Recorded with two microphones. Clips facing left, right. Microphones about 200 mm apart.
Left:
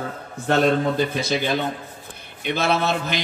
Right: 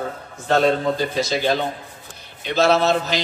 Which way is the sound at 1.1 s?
55° left (ahead or behind).